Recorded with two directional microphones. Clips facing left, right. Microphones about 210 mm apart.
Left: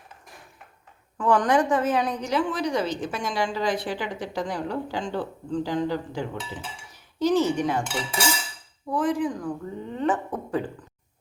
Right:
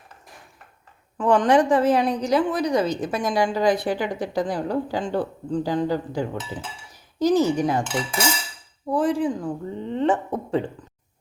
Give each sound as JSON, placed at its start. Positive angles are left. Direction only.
{"t": 1.2, "sound": "a woman's voice", "side_deg": -25}
{"t": 8.9, "sound": "a woman's voice", "side_deg": -30}